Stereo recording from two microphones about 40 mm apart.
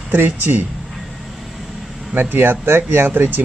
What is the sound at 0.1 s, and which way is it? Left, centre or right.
Speech, right.